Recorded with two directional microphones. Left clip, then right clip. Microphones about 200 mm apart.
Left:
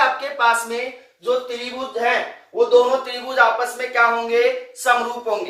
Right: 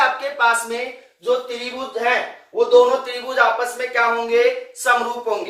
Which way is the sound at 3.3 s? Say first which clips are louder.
Left 1 dB; 5° left (ahead or behind).